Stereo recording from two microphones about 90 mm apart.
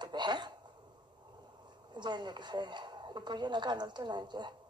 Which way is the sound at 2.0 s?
55° right (ahead or behind).